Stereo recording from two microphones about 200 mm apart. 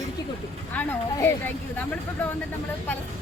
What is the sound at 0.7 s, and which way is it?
Speech, 10° left (ahead or behind).